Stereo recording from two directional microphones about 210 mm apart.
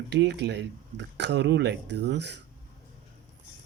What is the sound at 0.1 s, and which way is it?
Speech, 55° right (ahead or behind).